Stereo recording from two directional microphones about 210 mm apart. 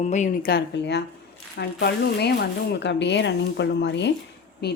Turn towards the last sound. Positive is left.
turn(degrees=50)  # may be behind; listen again after turning